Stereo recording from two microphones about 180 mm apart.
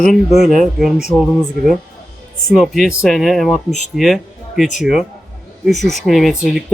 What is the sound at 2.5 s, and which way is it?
Speech, centre (ahead or behind).